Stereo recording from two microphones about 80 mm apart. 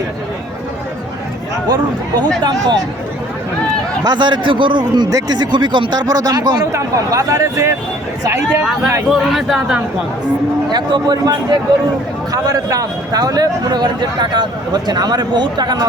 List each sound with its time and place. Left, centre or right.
1.6 s speech: right
4.0 s a man's voice: right
5.1 s speech: right
6.7 s speech: right
9.0 s speech: centre
10.7 s speech: right
12.3 s speech: right